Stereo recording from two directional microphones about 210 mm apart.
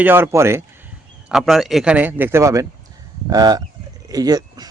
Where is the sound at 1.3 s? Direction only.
Centre (ahead or behind); by 4.7 s 20° right (ahead or behind).